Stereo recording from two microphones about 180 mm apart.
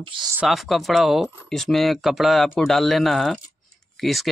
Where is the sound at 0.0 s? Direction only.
30° right (ahead or behind).